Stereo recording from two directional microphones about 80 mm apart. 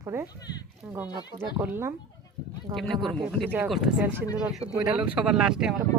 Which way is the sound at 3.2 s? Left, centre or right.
Centre.